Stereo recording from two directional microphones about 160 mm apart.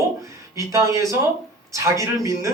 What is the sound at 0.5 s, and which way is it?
A man's voice, 20° right (ahead or behind).